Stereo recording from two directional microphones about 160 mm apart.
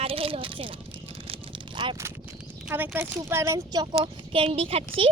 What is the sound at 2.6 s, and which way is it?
Speech, 10° right (ahead or behind).